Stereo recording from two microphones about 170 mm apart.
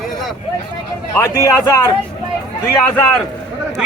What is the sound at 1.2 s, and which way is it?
A man's voice, 15° left (ahead or behind).